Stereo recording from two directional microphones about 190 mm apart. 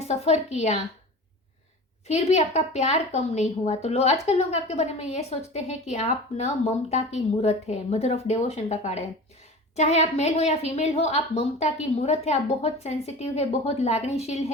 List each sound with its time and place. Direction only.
0.0 s a woman's voice: 35° left (ahead or behind)
2.0 s a woman's voice: 35° left (ahead or behind)